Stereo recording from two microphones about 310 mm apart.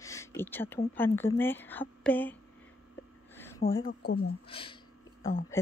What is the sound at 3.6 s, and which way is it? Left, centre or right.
Speech, left.